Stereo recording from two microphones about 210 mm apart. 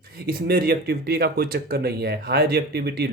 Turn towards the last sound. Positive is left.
turn(degrees=-50)  # may be behind; listen again after turning